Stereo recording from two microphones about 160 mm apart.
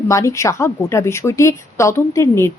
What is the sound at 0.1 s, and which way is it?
A woman's voice, 20° left (ahead or behind).